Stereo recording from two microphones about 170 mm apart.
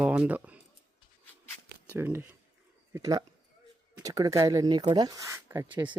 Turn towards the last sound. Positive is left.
turn(degrees=-15)  # may be behind; listen again after turning